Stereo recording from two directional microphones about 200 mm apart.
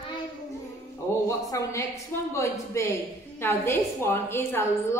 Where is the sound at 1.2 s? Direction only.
15° left (ahead or behind).